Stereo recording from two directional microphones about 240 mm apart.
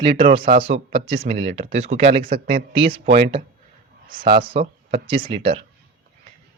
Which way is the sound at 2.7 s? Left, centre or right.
Right.